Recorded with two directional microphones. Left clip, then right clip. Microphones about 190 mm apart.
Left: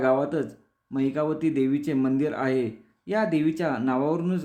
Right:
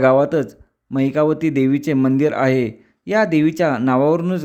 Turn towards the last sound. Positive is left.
turn(degrees=-45)  # may be behind; listen again after turning